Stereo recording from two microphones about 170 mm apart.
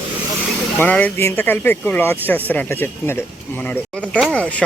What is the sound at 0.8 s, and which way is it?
Speech, 10° left (ahead or behind).